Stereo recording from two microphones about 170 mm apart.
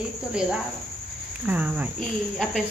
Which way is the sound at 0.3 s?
5° right (ahead or behind).